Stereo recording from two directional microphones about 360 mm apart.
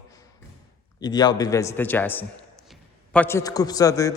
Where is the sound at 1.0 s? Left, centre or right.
Centre.